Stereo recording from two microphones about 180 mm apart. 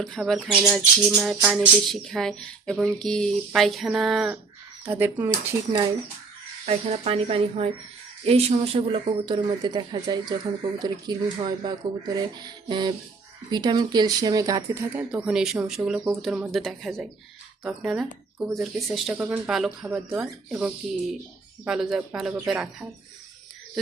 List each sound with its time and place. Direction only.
0.0 s speech: centre (ahead or behind)
6.7 s speech: 35° right (ahead or behind); by 22.9 s 5° right (ahead or behind)